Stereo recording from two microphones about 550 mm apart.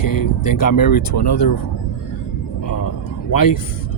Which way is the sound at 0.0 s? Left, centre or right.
Left.